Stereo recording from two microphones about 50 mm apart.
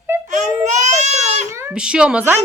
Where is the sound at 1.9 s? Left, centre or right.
Right.